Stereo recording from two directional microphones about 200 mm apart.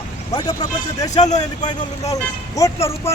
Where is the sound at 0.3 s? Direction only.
20° left (ahead or behind).